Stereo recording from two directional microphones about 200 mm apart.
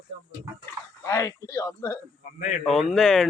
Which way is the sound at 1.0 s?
15° left (ahead or behind).